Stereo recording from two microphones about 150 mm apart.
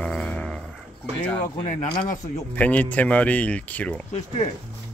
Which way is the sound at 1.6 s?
50° left (ahead or behind).